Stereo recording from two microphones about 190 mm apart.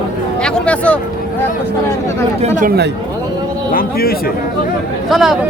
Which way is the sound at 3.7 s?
50° left (ahead or behind).